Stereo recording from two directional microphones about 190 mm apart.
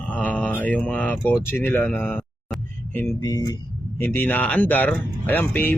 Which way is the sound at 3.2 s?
20° left (ahead or behind).